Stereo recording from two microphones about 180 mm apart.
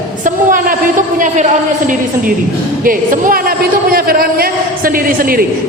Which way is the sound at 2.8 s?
50° right (ahead or behind).